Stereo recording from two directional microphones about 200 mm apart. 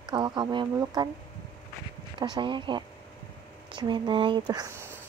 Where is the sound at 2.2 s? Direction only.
25° right (ahead or behind).